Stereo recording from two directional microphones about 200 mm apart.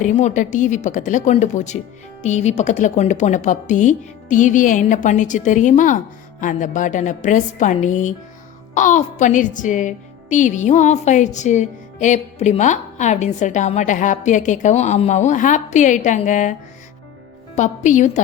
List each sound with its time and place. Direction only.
0.0 s a woman's voice: 35° left (ahead or behind)